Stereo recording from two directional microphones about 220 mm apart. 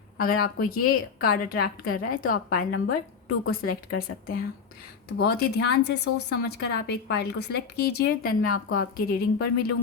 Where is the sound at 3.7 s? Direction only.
45° left (ahead or behind).